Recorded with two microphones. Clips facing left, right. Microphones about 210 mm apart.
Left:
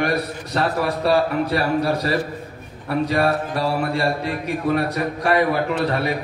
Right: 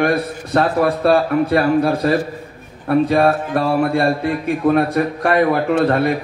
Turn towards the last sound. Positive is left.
turn(degrees=-55)  # may be behind; listen again after turning